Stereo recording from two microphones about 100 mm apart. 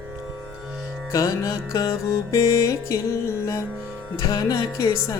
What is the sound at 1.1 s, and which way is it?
Music, 35° left (ahead or behind).